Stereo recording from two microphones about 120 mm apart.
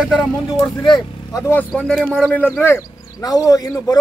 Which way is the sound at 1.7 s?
10° left (ahead or behind).